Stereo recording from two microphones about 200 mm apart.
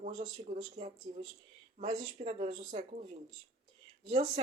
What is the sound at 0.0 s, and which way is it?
Speech, 35° right (ahead or behind).